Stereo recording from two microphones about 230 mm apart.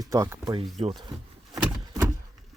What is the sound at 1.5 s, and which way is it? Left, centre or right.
Vehicle, centre.